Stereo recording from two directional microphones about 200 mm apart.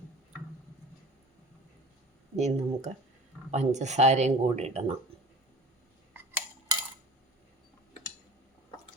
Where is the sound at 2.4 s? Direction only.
35° right (ahead or behind).